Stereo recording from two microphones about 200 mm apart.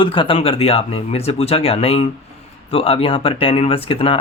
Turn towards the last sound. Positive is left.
turn(degrees=30)  # may be behind; listen again after turning